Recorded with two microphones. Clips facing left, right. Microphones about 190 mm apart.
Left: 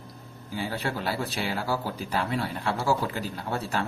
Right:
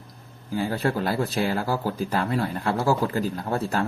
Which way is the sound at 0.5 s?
50° right (ahead or behind).